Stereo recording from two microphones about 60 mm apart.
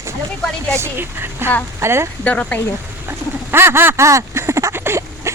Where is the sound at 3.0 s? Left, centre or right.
Right.